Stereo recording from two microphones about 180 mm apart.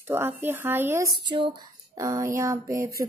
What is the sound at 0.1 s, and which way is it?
Speech, 10° right (ahead or behind).